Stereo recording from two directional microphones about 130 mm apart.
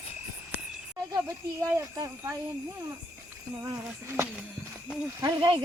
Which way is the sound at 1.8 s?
25° right (ahead or behind).